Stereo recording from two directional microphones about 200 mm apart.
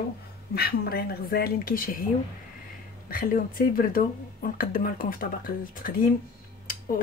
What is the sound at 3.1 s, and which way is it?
Speech, 45° left (ahead or behind).